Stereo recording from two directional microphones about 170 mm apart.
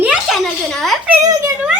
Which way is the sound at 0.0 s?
5° right (ahead or behind).